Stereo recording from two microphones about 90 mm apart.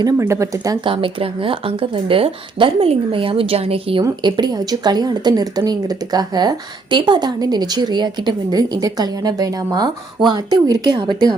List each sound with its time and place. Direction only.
0.2 s speech: 30° right (ahead or behind)
0.9 s speech: 75° right (ahead or behind); by 4.0 s 90° right
4.2 s speech: 55° right (ahead or behind)